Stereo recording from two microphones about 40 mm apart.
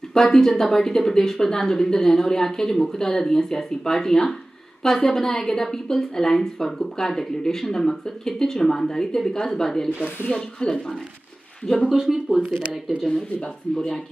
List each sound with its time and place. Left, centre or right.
0.1 s a woman's voice: centre
10.6 s speech: left
11.9 s speech: centre
13.1 s a woman's voice: centre